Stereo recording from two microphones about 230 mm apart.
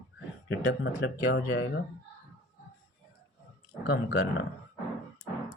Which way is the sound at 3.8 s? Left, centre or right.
Left.